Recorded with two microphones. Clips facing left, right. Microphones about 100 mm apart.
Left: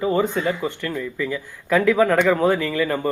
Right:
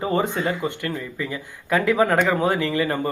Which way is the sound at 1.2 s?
10° right (ahead or behind).